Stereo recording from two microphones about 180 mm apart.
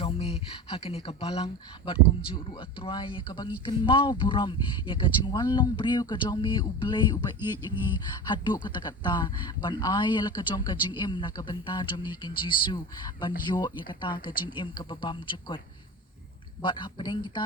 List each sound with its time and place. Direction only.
0.0 s speech: 35° left (ahead or behind)
8.6 s speech: 25° left (ahead or behind)